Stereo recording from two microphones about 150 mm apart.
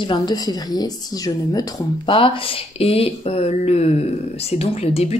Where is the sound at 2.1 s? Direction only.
35° left (ahead or behind).